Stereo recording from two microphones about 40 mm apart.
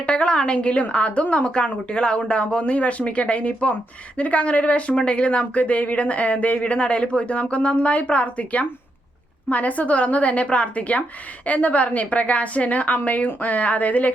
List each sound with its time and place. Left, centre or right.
0.0 s a woman's voice: left